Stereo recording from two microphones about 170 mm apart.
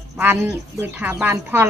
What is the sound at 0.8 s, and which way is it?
Speech, 10° right (ahead or behind).